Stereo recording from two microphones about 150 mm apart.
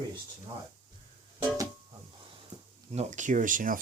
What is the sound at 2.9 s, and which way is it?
Speech, 55° right (ahead or behind).